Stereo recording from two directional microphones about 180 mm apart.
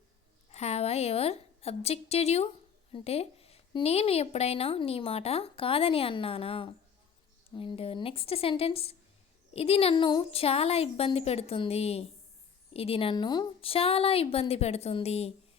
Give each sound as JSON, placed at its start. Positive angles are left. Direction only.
{"t": 0.5, "sound": "a woman's voice", "side_deg": 35}